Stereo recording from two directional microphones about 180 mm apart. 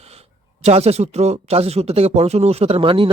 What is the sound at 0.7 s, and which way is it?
Speech, 35° right (ahead or behind).